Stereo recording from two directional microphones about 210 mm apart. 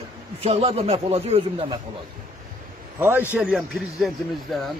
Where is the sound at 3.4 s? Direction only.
5° right (ahead or behind).